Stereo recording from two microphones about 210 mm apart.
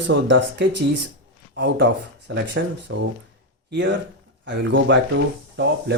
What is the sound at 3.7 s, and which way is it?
Speech, 60° right (ahead or behind).